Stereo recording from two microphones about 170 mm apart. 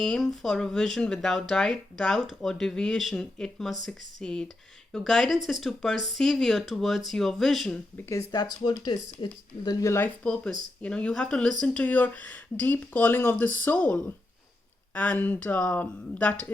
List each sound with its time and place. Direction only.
0.0 s speech: 5° left (ahead or behind)
7.9 s speech: 15° left (ahead or behind)
10.2 s speech: 5° left (ahead or behind)